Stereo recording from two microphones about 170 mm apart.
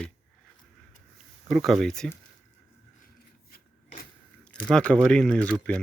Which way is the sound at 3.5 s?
55° left (ahead or behind).